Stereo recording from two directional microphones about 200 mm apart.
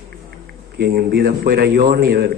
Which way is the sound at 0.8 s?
50° right (ahead or behind).